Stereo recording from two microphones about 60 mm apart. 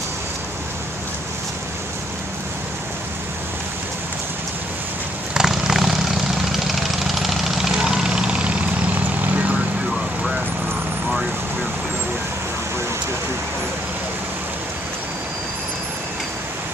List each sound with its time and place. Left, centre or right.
5.3 s vehicle: centre; by 9.6 s right